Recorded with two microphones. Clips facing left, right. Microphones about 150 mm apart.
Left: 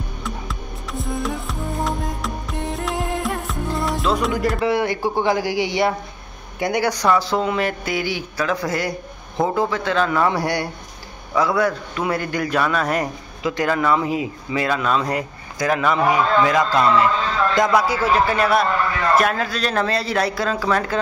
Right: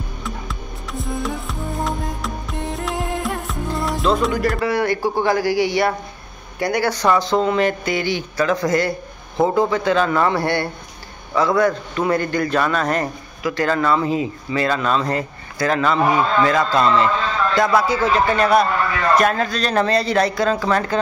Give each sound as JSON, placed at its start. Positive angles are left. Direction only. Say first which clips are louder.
{"t": 0.2, "sound": "music", "louder": "even", "side_deg": 0}
{"t": 4.6, "sound": "speech", "louder": "even", "side_deg": 20}
{"t": 13.4, "sound": "speech", "louder": "right 1 dB", "side_deg": 20}